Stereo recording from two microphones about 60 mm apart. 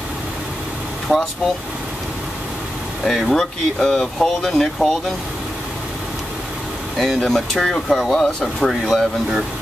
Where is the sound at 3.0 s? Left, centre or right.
Centre.